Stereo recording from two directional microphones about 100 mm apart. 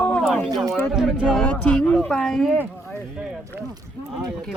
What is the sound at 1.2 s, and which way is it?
Speech, 10° left (ahead or behind).